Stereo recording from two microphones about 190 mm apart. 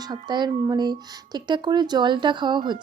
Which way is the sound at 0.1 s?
25° right (ahead or behind).